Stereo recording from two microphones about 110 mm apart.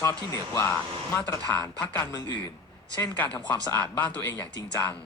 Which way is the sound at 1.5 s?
15° left (ahead or behind).